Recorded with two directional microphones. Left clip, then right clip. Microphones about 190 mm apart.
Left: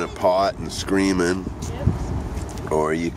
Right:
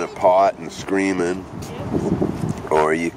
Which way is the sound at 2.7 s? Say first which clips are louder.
Right 4 dB; 15° right (ahead or behind).